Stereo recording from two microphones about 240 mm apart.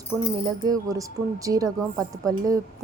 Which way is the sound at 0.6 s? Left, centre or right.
Centre.